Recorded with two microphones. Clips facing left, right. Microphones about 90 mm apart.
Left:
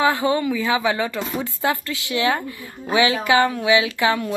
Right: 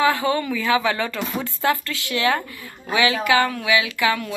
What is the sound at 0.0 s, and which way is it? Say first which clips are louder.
A woman's voice: left 1 dB; 20° left (ahead or behind).